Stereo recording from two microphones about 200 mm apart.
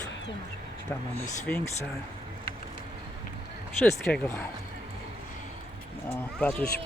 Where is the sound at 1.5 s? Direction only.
5° left (ahead or behind).